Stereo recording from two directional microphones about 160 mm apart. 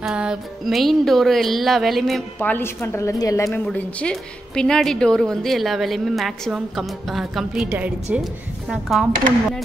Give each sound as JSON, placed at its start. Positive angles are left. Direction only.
{"t": 0.0, "sound": "a woman's voice", "side_deg": -5}
{"t": 2.3, "sound": "a woman's voice", "side_deg": 10}
{"t": 3.5, "sound": "a woman's voice", "side_deg": 10}